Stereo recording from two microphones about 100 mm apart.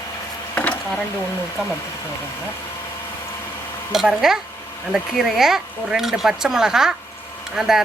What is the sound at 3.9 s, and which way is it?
Speech, 5° right (ahead or behind).